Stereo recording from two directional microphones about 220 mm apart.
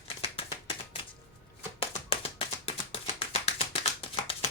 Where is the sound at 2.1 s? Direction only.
25° left (ahead or behind).